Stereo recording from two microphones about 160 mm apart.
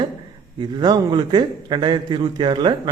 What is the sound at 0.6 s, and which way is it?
A man's voice, 25° right (ahead or behind).